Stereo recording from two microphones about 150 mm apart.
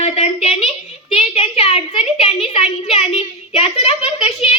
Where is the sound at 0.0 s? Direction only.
45° left (ahead or behind).